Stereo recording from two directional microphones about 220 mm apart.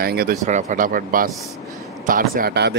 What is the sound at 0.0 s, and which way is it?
Speech, 45° right (ahead or behind).